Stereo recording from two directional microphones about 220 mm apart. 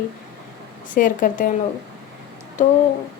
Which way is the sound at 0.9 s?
40° left (ahead or behind).